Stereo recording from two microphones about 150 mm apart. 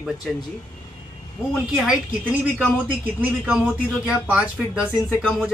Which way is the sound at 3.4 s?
5° right (ahead or behind).